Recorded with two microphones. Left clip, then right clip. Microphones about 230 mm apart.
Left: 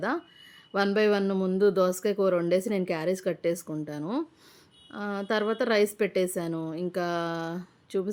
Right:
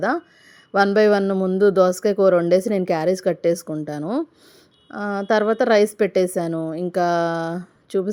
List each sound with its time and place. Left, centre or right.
0.7 s speech: centre